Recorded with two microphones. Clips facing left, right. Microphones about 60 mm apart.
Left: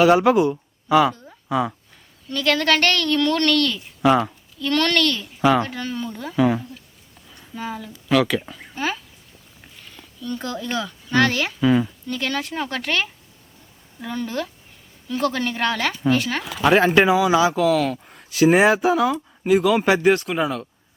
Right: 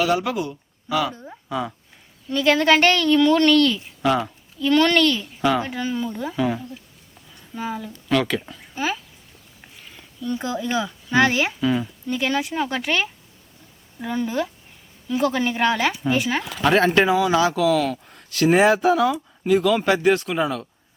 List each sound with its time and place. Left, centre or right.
0.0 s speech: left
1.1 s a sound: right
1.5 s speech: centre
2.3 s a woman's voice: centre
4.0 s speech: centre
4.6 s a woman's voice: centre
6.3 s speech: centre
7.3 s speech: centre
9.9 s speech: centre
11.6 s speech: centre
12.0 s a woman's voice: centre
16.5 s speech: centre